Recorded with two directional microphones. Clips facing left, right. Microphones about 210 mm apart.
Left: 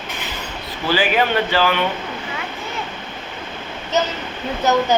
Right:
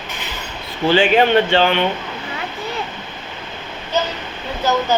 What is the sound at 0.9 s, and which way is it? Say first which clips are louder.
Speech: right 5 dB; 25° right (ahead or behind).